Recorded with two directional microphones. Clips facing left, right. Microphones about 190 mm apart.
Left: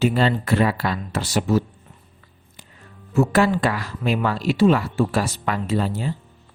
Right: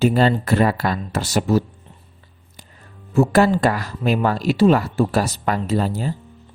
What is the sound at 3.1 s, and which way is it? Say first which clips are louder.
Speech: right 3 dB; 35° right (ahead or behind).